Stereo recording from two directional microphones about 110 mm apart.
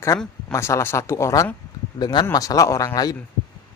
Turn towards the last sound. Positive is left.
turn(degrees=35)  # may be behind; listen again after turning